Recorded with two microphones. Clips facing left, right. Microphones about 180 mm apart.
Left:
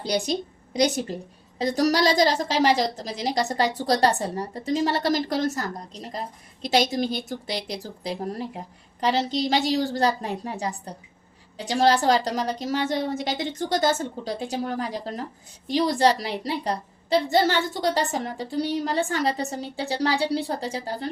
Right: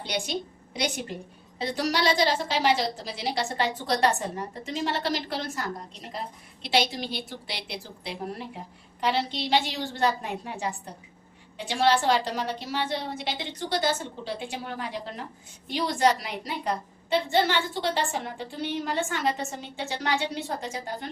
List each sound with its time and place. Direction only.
0.0 s a woman's voice: 35° left (ahead or behind)